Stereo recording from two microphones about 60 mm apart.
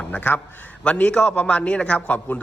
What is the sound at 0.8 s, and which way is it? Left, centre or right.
A man's voice, centre.